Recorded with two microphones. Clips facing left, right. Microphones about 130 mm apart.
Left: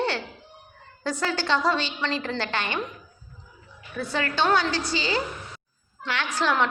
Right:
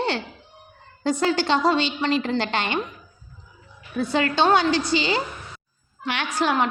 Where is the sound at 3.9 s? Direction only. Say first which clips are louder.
Right 5 dB; 20° right (ahead or behind).